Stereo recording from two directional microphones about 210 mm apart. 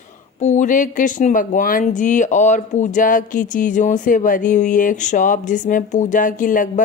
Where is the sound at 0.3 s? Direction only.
35° left (ahead or behind).